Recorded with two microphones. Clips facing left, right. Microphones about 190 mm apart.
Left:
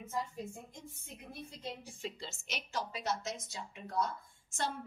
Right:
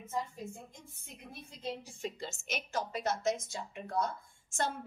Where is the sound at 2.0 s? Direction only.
45° right (ahead or behind).